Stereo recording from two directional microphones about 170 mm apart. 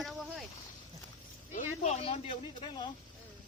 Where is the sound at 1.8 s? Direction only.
40° left (ahead or behind).